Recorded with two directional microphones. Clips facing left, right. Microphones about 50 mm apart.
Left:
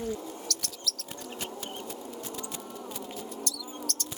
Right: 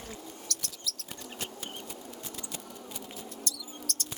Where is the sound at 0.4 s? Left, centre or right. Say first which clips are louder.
Left 3 dB; centre.